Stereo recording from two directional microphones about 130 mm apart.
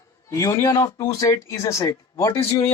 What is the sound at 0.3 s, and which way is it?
Speech, 25° left (ahead or behind).